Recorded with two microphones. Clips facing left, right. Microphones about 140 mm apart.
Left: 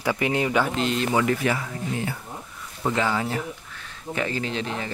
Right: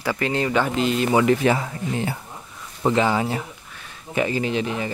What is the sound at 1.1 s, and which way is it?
Speech, 20° right (ahead or behind).